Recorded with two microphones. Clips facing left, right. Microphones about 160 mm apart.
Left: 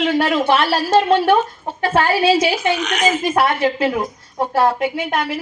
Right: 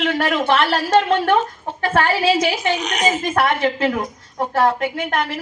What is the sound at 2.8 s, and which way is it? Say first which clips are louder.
Speech: left 2 dB; 40° right (ahead or behind).